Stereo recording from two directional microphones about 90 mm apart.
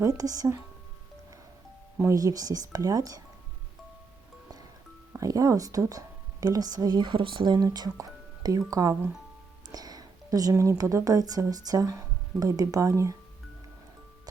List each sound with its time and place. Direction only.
0.0 s speech: 40° right (ahead or behind)
2.0 s speech: 40° right (ahead or behind)
5.1 s speech: 40° right (ahead or behind)
7.9 s speech: 40° right (ahead or behind)
9.6 s a sound: 45° right (ahead or behind)
10.5 s speech: 35° right (ahead or behind)